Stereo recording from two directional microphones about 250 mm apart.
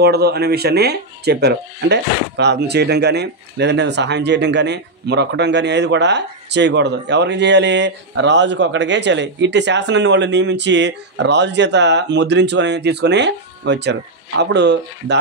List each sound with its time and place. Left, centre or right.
0.0 s speech: right